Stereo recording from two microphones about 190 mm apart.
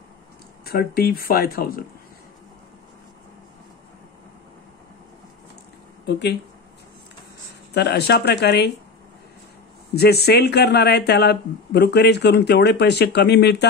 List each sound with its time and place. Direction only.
0.7 s speech: 55° left (ahead or behind)
6.0 s speech: 65° left (ahead or behind)
7.7 s speech: 60° left (ahead or behind)
9.9 s speech: 55° left (ahead or behind)